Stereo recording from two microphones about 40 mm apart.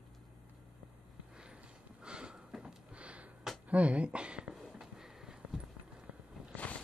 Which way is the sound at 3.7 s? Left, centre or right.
Right.